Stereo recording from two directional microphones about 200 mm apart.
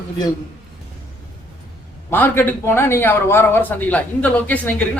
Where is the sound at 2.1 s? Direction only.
10° left (ahead or behind).